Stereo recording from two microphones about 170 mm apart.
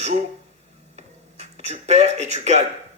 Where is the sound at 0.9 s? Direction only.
40° right (ahead or behind).